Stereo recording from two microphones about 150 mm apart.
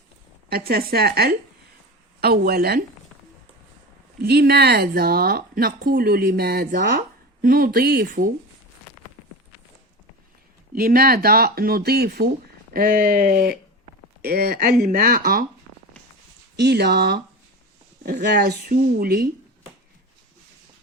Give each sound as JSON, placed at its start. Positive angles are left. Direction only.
{"t": 0.5, "sound": "speech", "side_deg": -90}
{"t": 4.2, "sound": "speech", "side_deg": -90}
{"t": 7.4, "sound": "speech", "side_deg": -75}
{"t": 10.8, "sound": "speech", "side_deg": -80}
{"t": 12.7, "sound": "speech", "side_deg": -75}
{"t": 14.2, "sound": "speech", "side_deg": -90}
{"t": 16.6, "sound": "speech", "side_deg": -90}